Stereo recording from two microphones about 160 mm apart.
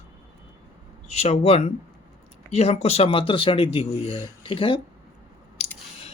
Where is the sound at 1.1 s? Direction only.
40° left (ahead or behind).